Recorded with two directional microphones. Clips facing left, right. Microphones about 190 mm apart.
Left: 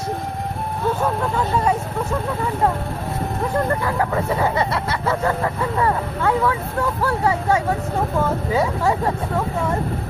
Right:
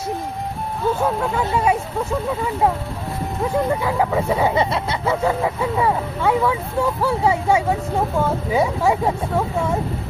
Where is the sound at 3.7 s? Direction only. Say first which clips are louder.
Right 1 dB; 10° right (ahead or behind).